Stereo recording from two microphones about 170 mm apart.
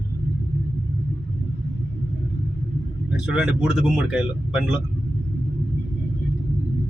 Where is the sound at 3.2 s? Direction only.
5° right (ahead or behind).